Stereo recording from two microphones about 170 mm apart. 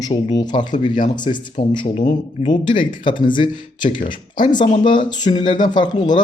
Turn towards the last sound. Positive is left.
turn(degrees=25)  # may be behind; listen again after turning